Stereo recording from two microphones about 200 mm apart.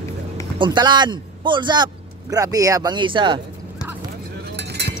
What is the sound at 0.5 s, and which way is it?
Speech, 25° right (ahead or behind).